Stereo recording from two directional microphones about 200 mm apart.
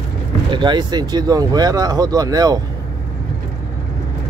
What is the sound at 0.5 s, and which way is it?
Speech, 25° right (ahead or behind).